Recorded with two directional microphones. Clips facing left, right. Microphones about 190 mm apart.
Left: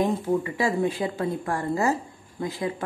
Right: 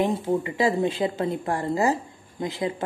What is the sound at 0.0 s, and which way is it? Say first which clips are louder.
A woman's voice: even; 20° right (ahead or behind).